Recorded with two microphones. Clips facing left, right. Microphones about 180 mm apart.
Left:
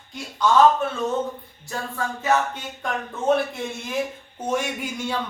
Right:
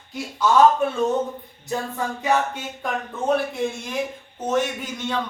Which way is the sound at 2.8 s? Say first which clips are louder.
Even; centre (ahead or behind).